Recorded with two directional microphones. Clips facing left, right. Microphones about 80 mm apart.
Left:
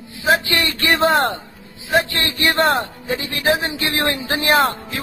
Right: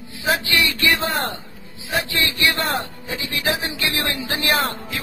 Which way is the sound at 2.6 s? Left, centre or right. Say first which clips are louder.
Left 7 dB; left.